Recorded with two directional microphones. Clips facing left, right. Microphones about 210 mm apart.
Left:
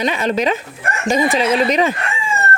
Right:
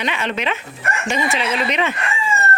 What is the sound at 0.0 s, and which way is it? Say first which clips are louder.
Speech: left 6 dB; 40° left (ahead or behind).